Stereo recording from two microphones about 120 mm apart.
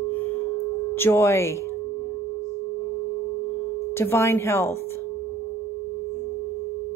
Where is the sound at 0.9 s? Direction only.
20° left (ahead or behind).